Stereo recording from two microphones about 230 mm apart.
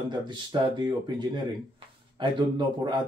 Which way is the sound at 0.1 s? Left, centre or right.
Centre.